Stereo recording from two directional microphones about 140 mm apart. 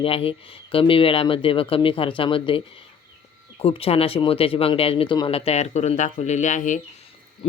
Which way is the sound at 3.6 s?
45° left (ahead or behind).